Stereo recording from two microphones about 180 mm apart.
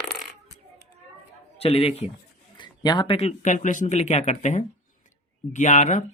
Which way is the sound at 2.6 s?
25° left (ahead or behind).